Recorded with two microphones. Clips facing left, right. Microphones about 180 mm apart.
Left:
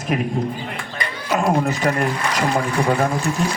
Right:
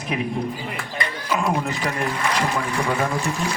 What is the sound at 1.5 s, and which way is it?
Speech, 40° left (ahead or behind).